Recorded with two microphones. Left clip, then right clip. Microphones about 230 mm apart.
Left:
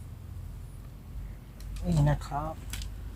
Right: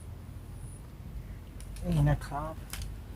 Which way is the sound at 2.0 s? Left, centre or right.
Centre.